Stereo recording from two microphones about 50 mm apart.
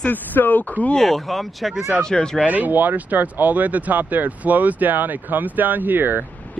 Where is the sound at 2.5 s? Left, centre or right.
Right.